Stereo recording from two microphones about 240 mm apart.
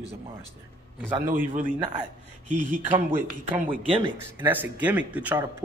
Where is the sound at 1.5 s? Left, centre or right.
Right.